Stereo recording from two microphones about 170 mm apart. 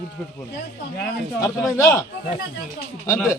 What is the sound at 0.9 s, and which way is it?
Speech, 15° left (ahead or behind).